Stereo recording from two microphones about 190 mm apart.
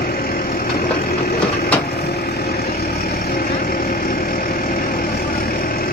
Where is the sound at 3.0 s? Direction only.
50° left (ahead or behind).